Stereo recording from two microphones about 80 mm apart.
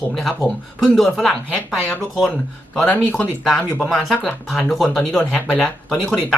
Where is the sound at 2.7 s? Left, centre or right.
Centre.